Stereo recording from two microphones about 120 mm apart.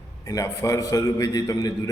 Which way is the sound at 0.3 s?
30° left (ahead or behind).